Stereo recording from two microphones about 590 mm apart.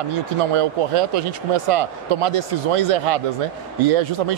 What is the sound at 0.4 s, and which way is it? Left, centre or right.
A man's voice, right.